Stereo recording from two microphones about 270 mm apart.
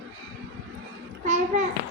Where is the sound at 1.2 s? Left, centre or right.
Right.